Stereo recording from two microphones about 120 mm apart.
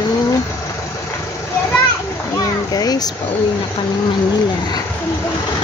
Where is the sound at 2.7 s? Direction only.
35° left (ahead or behind).